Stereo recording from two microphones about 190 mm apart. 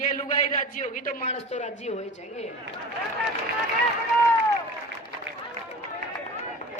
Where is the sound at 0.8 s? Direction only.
45° left (ahead or behind).